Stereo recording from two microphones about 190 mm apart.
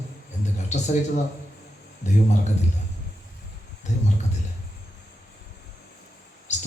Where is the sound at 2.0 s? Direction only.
40° left (ahead or behind).